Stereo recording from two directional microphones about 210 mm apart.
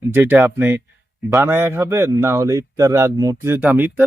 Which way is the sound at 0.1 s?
10° right (ahead or behind).